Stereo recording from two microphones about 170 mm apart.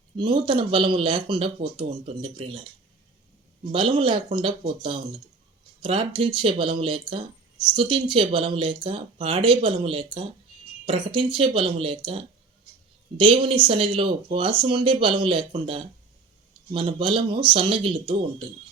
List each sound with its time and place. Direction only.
0.2 s a man's voice: 30° right (ahead or behind)
3.7 s a man's voice: 30° right (ahead or behind)